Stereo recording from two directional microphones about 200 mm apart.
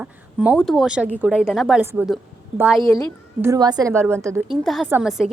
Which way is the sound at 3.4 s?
15° right (ahead or behind).